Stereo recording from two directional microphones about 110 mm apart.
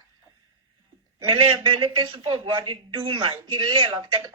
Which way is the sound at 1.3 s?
50° right (ahead or behind).